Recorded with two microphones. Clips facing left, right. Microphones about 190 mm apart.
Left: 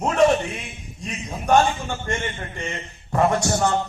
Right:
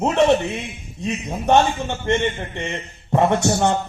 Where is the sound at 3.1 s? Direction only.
25° right (ahead or behind).